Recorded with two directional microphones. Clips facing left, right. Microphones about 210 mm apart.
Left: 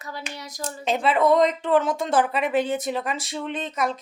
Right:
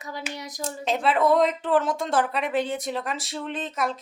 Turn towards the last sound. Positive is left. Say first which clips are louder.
# left 2 dB
turn(degrees=0)  # may be behind; listen again after turning